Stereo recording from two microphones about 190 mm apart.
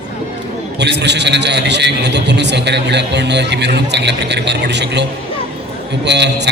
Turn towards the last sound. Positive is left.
turn(degrees=-65)  # may be behind; listen again after turning